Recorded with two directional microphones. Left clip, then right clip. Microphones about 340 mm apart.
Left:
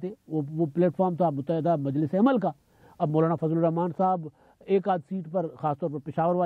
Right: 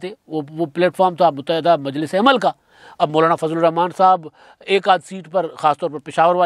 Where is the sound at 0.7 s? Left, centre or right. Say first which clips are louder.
Right 11 dB; centre.